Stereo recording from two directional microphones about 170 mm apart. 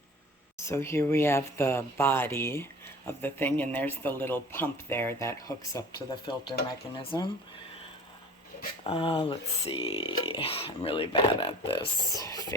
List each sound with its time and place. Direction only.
0.6 s speech: 15° left (ahead or behind)
8.8 s speech: 35° left (ahead or behind)
12.1 s speech: 20° left (ahead or behind)